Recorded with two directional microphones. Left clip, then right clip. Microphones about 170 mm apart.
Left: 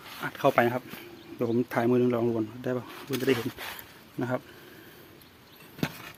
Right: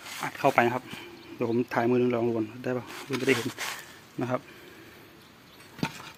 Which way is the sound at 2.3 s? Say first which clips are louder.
Even; 15° left (ahead or behind).